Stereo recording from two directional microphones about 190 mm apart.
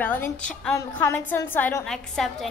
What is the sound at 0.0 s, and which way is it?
A woman's voice, 10° left (ahead or behind).